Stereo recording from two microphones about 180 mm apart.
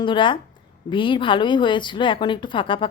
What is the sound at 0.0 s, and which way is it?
A woman's voice, 25° left (ahead or behind).